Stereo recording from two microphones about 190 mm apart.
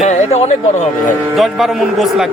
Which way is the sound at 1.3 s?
Centre (ahead or behind).